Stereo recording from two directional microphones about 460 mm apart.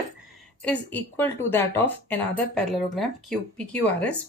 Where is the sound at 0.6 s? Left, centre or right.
Centre.